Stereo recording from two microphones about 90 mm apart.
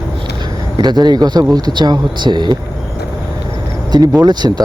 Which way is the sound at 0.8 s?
50° right (ahead or behind).